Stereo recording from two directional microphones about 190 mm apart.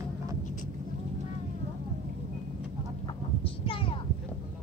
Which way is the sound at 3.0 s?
30° left (ahead or behind).